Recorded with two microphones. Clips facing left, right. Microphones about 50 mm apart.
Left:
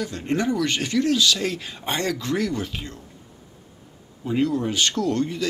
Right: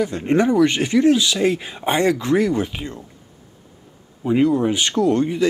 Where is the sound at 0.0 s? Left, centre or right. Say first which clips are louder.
Right 7 dB; centre.